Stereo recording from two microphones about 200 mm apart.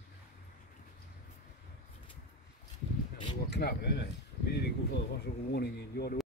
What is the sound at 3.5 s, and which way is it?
Speech, 55° left (ahead or behind).